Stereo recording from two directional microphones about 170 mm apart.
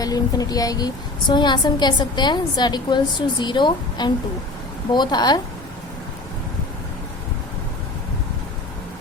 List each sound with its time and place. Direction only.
0.0 s a woman's voice: 20° left (ahead or behind)